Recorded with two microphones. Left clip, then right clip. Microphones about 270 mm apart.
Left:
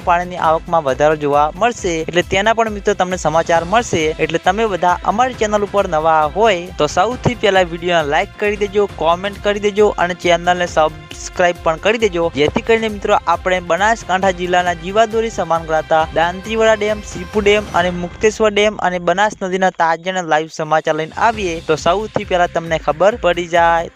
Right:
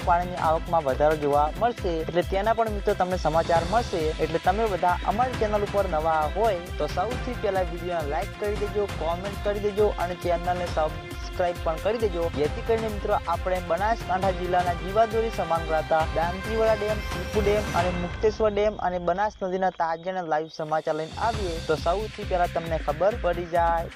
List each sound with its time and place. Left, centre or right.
0.1 s speech: left
18.2 s speech: left